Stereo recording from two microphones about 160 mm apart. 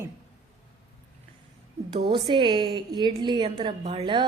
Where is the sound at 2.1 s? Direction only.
30° right (ahead or behind).